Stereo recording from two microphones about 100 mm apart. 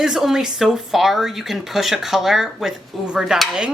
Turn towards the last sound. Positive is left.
turn(degrees=-5)  # may be behind; listen again after turning